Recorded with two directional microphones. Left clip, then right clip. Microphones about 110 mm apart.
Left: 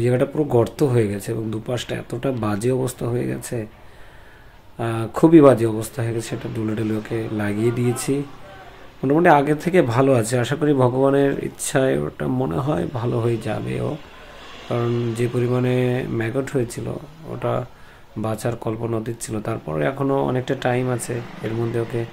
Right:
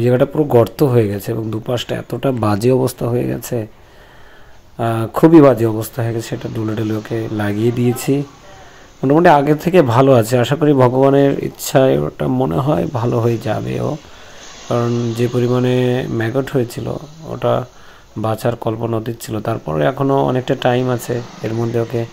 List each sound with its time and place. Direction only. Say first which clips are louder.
0.0 s speech: right 6 dB; 40° right (ahead or behind)
4.7 s speech: right 6 dB; 40° right (ahead or behind)